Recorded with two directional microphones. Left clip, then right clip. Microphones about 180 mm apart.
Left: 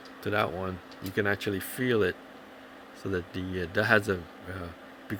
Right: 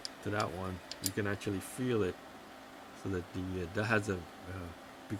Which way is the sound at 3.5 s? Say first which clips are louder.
Left 9 dB; 15° left (ahead or behind).